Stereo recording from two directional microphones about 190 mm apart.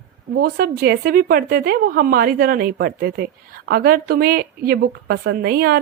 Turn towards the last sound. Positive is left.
turn(degrees=-55)  # may be behind; listen again after turning